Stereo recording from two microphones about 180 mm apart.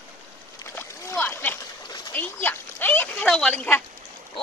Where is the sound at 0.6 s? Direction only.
15° left (ahead or behind).